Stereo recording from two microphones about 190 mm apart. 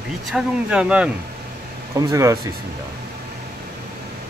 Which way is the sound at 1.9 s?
15° right (ahead or behind).